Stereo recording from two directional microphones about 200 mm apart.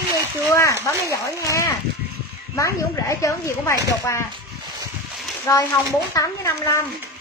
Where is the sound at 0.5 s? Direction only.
15° left (ahead or behind).